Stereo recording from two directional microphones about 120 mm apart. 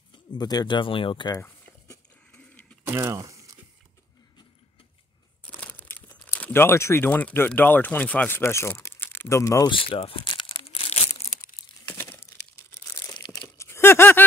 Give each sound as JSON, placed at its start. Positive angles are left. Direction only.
{"t": 0.1, "sound": "speech", "side_deg": 35}
{"t": 2.9, "sound": "a sound", "side_deg": -25}
{"t": 5.6, "sound": "speech", "side_deg": 15}
{"t": 9.7, "sound": "speech", "side_deg": 50}
{"t": 10.6, "sound": "crumpling", "side_deg": 55}
{"t": 11.9, "sound": "crumpling", "side_deg": 20}
{"t": 13.6, "sound": "a sound", "side_deg": 20}